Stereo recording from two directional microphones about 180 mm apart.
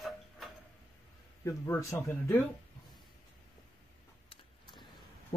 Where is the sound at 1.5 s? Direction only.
15° left (ahead or behind).